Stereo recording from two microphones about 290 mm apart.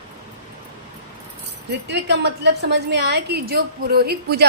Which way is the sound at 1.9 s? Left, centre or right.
Right.